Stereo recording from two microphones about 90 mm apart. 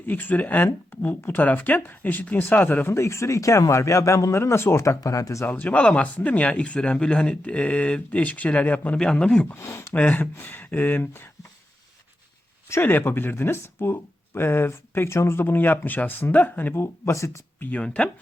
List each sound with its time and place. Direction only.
0.0 s speech: 20° left (ahead or behind); by 5.5 s 35° left (ahead or behind)
5.5 s speech: 20° left (ahead or behind)
9.6 s speech: 30° left (ahead or behind)
9.9 s speech: 15° left (ahead or behind)
12.6 s speech: 25° left (ahead or behind)
17.6 s speech: 15° left (ahead or behind)